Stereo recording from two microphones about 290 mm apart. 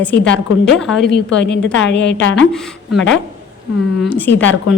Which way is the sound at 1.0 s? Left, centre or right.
Left.